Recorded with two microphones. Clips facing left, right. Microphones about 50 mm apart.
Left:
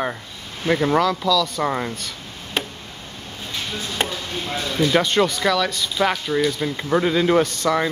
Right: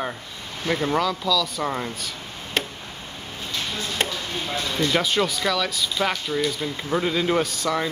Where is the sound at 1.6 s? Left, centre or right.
Centre.